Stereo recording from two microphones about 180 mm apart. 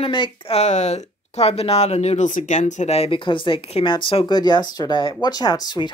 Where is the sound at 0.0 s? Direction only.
30° left (ahead or behind).